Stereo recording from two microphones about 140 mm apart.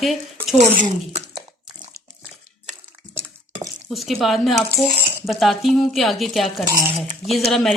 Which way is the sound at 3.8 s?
Centre (ahead or behind).